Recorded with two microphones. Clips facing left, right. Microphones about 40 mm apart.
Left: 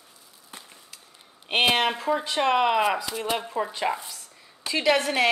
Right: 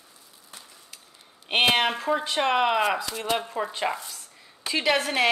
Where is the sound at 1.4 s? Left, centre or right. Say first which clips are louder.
Even; centre.